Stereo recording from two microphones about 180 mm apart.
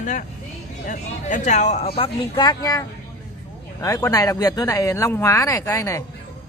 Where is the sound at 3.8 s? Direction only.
15° left (ahead or behind).